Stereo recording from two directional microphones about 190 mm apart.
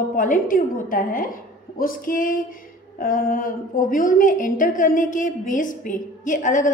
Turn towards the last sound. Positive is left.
turn(degrees=40)  # may be behind; listen again after turning